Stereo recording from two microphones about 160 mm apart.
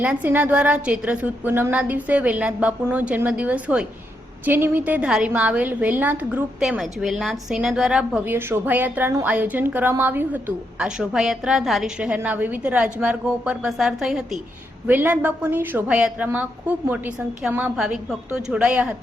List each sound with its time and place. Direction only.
0.0 s a woman's voice: 10° right (ahead or behind)